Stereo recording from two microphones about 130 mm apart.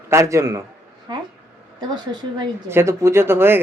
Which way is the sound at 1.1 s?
35° right (ahead or behind).